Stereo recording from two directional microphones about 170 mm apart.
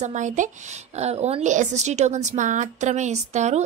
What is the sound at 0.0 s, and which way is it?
A woman's voice, 45° right (ahead or behind).